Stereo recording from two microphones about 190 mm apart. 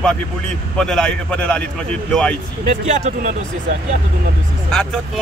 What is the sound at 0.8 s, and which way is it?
Speech, 5° left (ahead or behind).